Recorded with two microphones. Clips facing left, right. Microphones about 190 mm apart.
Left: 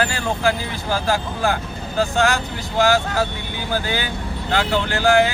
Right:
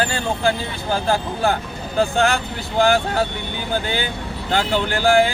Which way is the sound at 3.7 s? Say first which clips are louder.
Even; 25° right (ahead or behind).